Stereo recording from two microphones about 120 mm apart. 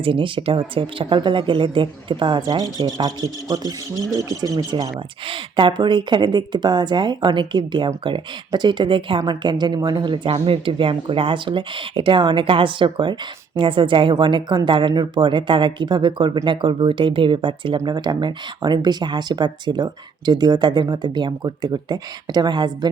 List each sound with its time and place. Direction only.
0.0 s speech: 45° right (ahead or behind)
10.3 s speech: 50° right (ahead or behind)